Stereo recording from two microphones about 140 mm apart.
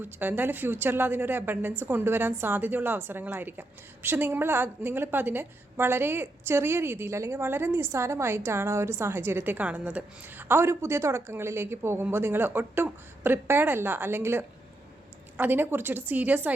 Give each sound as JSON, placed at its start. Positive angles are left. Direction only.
{"t": 0.0, "sound": "a woman's voice", "side_deg": -15}